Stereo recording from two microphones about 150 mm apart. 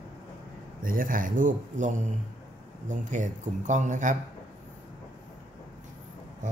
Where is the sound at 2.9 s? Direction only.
55° right (ahead or behind).